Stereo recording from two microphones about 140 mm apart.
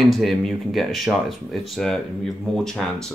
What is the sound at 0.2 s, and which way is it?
Speech, centre (ahead or behind).